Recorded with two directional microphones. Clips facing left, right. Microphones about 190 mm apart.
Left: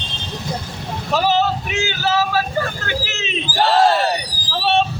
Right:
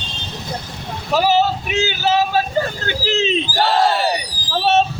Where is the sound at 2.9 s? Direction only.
30° right (ahead or behind).